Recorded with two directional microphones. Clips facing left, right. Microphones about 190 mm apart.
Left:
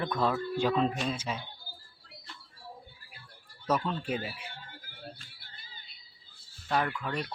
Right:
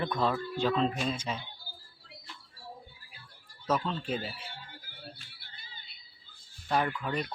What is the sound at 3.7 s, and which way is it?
Speech, 10° left (ahead or behind).